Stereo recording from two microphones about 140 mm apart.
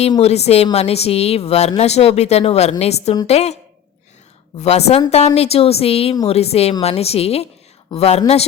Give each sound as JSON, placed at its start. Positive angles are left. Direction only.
{"t": 0.2, "sound": "a woman's voice", "side_deg": 50}
{"t": 4.6, "sound": "a woman's voice", "side_deg": 50}